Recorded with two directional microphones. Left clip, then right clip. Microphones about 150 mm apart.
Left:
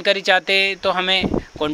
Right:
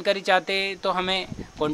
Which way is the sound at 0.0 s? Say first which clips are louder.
Left 5 dB; 15° left (ahead or behind).